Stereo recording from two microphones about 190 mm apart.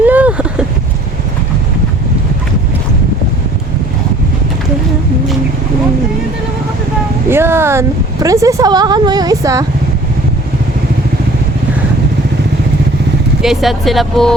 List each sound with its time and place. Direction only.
0.0 s vehicle: 10° right (ahead or behind)
7.3 s a sound: 10° right (ahead or behind)
13.4 s speech: centre (ahead or behind)